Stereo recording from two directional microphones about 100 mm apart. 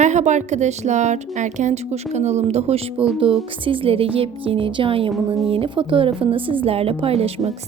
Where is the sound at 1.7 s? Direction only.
90° right.